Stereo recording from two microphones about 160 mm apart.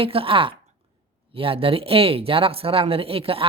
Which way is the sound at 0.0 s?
35° right (ahead or behind).